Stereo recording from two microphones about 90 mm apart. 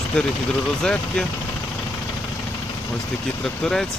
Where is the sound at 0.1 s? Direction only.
10° left (ahead or behind).